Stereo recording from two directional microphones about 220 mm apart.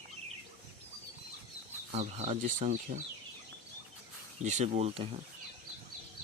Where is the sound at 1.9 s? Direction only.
30° right (ahead or behind).